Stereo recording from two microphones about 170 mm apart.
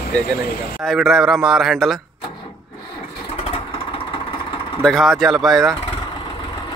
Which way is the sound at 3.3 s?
35° left (ahead or behind).